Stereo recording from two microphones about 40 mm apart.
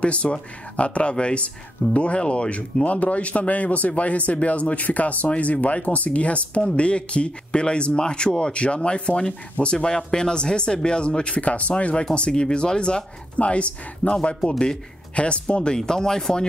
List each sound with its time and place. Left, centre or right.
0.0 s speech: left
11.7 s speech: left
15.1 s speech: left
15.7 s speech: centre